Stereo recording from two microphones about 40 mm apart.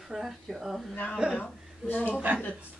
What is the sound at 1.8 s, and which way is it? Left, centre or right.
Speech, left.